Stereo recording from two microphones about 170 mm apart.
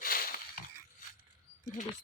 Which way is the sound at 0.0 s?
60° left (ahead or behind).